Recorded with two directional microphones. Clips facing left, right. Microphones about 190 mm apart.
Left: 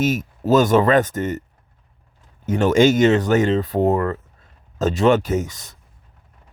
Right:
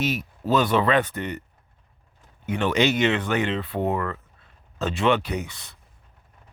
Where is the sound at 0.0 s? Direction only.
45° left (ahead or behind).